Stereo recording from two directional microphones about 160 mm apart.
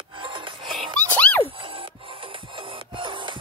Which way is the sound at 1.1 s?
10° left (ahead or behind).